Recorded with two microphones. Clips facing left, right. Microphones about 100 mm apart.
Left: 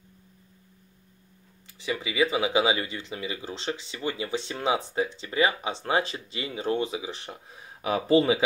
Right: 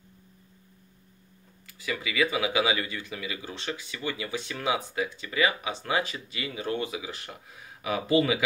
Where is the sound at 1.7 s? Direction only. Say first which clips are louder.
Left 2 dB; 25° left (ahead or behind).